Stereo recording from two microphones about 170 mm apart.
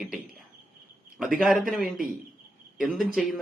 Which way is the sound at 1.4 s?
Centre (ahead or behind).